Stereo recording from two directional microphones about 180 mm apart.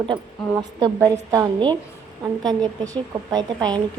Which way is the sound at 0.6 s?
20° right (ahead or behind).